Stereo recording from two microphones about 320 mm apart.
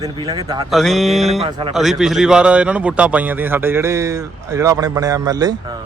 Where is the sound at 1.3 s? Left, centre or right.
Centre.